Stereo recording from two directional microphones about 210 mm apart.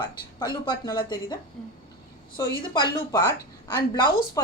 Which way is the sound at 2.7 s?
15° left (ahead or behind).